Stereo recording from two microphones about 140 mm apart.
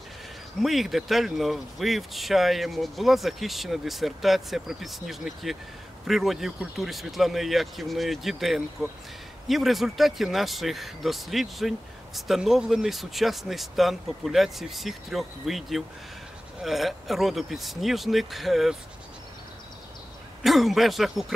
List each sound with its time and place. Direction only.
0.6 s speech: centre (ahead or behind)
20.4 s speech: centre (ahead or behind)